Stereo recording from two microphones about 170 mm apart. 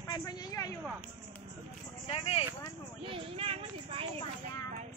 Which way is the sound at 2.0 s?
35° left (ahead or behind).